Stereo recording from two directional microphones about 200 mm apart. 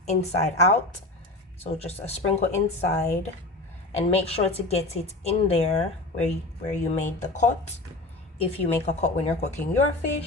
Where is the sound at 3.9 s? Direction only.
30° left (ahead or behind).